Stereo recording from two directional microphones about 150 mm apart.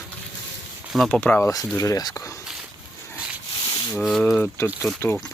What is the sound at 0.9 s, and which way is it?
Speech, 5° left (ahead or behind).